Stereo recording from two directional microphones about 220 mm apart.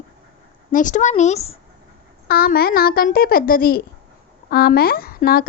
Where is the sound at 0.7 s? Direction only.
35° left (ahead or behind).